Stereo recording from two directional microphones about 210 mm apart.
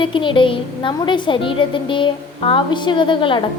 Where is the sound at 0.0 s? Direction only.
25° left (ahead or behind).